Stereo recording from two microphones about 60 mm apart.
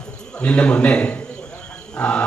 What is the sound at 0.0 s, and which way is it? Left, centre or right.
A man's voice, centre.